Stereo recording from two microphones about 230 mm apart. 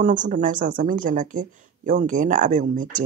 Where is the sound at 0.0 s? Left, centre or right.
Right.